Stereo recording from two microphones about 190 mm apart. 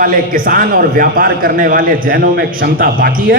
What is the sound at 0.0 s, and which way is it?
A man's voice, 50° right (ahead or behind).